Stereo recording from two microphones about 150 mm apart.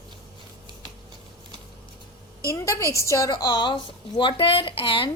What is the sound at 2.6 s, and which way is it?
A woman's voice, 20° left (ahead or behind).